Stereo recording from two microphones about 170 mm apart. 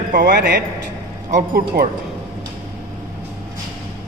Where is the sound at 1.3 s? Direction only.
60° right (ahead or behind).